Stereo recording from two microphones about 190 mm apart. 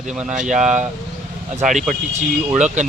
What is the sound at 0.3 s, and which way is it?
Speech, 40° right (ahead or behind).